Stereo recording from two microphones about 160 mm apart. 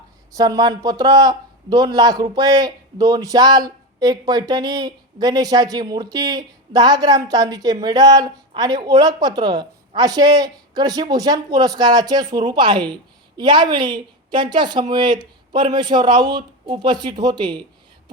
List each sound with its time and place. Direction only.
0.3 s speech: 25° right (ahead or behind)